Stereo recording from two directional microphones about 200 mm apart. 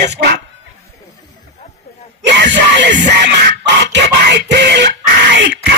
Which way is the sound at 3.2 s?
55° right (ahead or behind).